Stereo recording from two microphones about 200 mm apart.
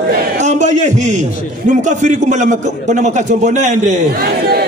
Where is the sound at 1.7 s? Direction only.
40° right (ahead or behind).